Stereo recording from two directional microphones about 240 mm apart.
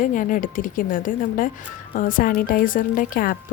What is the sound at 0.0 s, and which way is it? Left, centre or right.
Speech, left.